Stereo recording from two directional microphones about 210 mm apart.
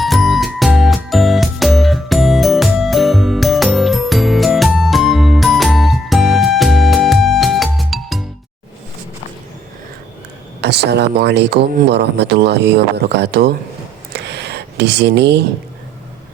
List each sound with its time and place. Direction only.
0.0 s music: centre (ahead or behind)
10.6 s speech: 50° right (ahead or behind)
14.1 s a sound: 50° right (ahead or behind)